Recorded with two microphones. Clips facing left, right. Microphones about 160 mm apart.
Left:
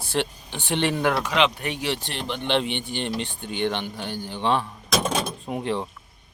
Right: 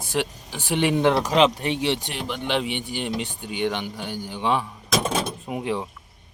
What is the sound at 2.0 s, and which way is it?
Speech, 10° right (ahead or behind).